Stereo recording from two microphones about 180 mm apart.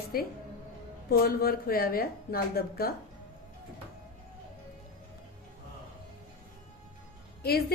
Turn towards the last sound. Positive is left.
turn(degrees=60)  # may be behind; listen again after turning